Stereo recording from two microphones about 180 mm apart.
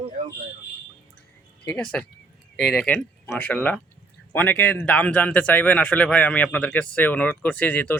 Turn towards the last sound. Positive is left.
turn(degrees=10)  # may be behind; listen again after turning